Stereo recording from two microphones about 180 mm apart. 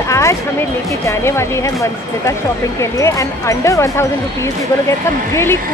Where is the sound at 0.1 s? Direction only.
15° left (ahead or behind).